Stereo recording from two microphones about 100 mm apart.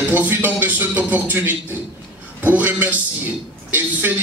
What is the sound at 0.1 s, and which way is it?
A man's voice, 20° right (ahead or behind).